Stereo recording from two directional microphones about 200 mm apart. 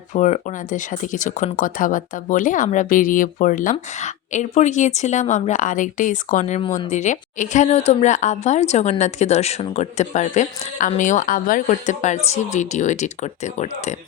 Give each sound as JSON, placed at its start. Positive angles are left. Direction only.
{"t": 0.1, "sound": "speech", "side_deg": 35}